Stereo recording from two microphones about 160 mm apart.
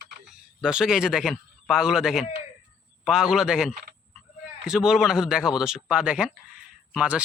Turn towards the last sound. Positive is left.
turn(degrees=-5)  # may be behind; listen again after turning